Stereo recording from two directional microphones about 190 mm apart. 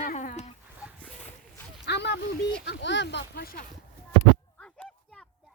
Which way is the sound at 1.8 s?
65° left (ahead or behind).